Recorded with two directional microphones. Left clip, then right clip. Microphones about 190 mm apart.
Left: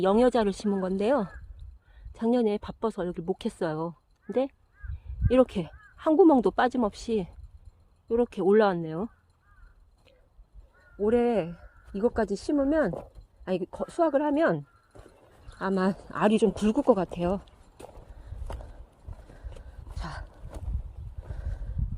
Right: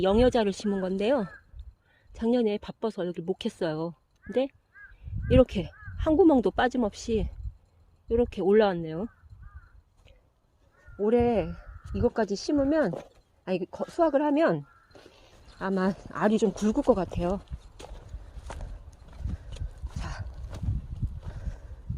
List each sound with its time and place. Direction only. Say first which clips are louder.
0.0 s speech: even; 5° right (ahead or behind)
11.0 s speech: even; 15° right (ahead or behind); by 17.9 s 5° left (ahead or behind)
18.5 s horse: even; 15° left (ahead or behind)
19.5 s dog: right 1 dB; centre (ahead or behind)
21.2 s a sound: even; centre (ahead or behind)